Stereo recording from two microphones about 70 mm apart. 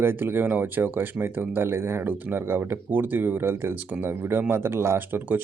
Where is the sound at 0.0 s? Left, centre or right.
Right.